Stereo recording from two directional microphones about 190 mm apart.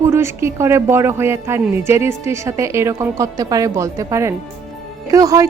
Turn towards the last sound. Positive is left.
turn(degrees=-20)  # may be behind; listen again after turning